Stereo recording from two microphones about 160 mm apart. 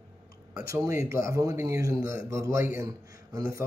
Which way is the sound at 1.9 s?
60° left (ahead or behind).